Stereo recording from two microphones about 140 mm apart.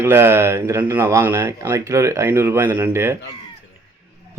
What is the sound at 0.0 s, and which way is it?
Speech, 15° right (ahead or behind).